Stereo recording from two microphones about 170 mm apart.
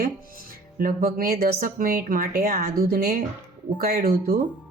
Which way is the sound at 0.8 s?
60° right (ahead or behind).